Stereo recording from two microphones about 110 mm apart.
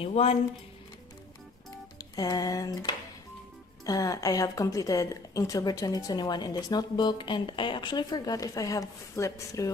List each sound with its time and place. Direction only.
0.0 s speech: 65° left (ahead or behind)
2.0 s music: 35° left (ahead or behind)
3.8 s a woman's voice: 35° left (ahead or behind)